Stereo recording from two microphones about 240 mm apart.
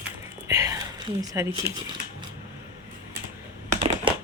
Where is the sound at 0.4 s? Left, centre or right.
Centre.